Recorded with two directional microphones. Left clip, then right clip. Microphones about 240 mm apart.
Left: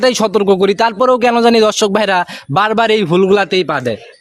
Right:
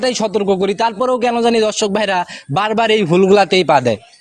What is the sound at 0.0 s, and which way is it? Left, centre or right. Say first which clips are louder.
A man's voice: left 4 dB; left.